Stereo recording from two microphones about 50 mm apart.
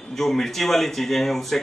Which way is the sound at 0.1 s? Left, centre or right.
Centre.